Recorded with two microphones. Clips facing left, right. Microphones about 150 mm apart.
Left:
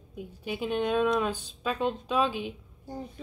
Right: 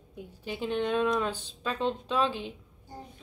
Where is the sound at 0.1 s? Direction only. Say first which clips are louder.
Left 3 dB; 10° left (ahead or behind).